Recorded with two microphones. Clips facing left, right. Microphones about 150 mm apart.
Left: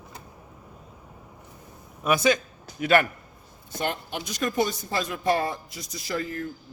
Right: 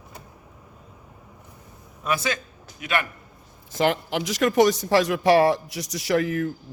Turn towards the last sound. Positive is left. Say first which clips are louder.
# right 8 dB
turn(degrees=-70)  # may be behind; listen again after turning